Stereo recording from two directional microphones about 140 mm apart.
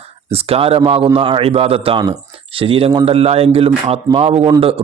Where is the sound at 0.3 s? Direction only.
45° right (ahead or behind).